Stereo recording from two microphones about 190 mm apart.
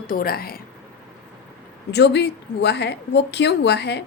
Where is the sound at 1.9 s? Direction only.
60° left (ahead or behind).